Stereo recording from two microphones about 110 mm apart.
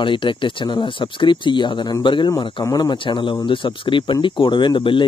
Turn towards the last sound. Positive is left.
turn(degrees=50)  # may be behind; listen again after turning